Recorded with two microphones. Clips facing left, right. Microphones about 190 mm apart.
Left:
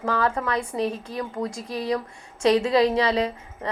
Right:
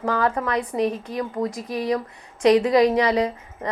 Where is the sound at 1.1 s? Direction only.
15° right (ahead or behind).